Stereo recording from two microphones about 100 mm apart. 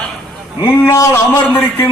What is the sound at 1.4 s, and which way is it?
Speech, 15° left (ahead or behind).